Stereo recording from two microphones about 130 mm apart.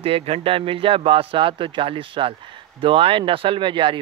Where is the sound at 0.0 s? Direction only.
50° right (ahead or behind).